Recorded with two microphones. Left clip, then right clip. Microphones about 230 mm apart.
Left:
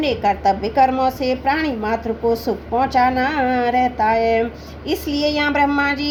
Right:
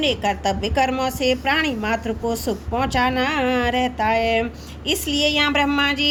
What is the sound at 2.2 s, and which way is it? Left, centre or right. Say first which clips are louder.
A woman's voice: left 5 dB; right.